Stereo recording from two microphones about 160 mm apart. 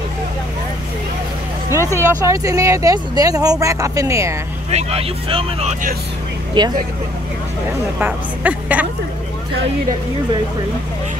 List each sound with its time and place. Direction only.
1.7 s speech: 20° right (ahead or behind)
4.6 s speech: 40° right (ahead or behind)
6.6 s speech: 30° right (ahead or behind)
8.0 s a woman's voice: 10° right (ahead or behind)